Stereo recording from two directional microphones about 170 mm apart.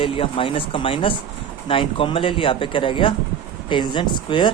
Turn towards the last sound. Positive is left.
turn(degrees=25)  # may be behind; listen again after turning